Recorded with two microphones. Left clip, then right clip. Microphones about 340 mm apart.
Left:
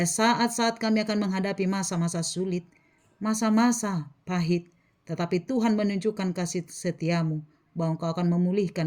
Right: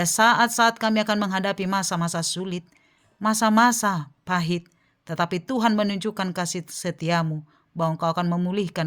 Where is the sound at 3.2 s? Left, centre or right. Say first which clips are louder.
Right 7 dB; right.